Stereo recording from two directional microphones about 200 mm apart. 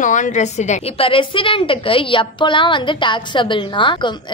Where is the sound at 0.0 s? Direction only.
40° left (ahead or behind).